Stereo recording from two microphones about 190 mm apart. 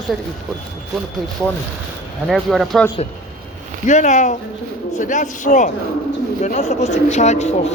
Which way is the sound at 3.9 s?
40° left (ahead or behind).